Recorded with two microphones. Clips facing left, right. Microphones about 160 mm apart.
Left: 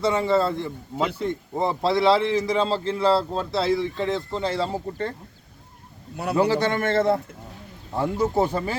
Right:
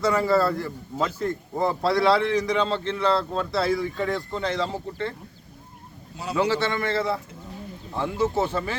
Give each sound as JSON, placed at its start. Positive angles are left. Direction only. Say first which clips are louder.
{"t": 0.0, "sound": "a man's voice", "louder": "even", "side_deg": 25}
{"t": 6.3, "sound": "a man's voice", "louder": "left 3 dB", "side_deg": 35}
{"t": 8.0, "sound": "speech", "louder": "left 2 dB", "side_deg": 15}
{"t": 8.5, "sound": "speech", "louder": "left 2 dB", "side_deg": 35}